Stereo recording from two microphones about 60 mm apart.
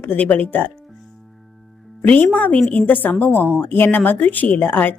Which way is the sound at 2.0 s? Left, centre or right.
Left.